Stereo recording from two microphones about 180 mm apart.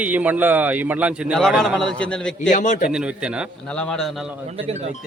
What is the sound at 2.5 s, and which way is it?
Speech, 45° left (ahead or behind).